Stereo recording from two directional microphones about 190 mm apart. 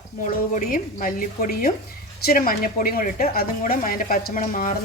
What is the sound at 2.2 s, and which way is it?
A woman's voice, 50° left (ahead or behind).